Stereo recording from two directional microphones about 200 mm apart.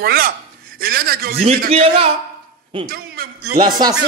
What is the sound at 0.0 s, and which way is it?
A man's voice, 50° right (ahead or behind).